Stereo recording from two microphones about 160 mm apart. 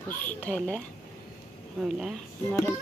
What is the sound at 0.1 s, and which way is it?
Speech, 10° left (ahead or behind).